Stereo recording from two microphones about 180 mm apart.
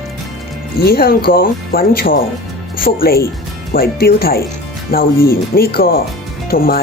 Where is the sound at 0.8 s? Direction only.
55° left (ahead or behind).